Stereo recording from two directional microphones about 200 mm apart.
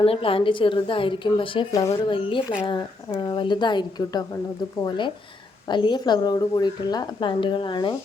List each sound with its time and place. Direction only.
0.0 s a woman's voice: 30° left (ahead or behind)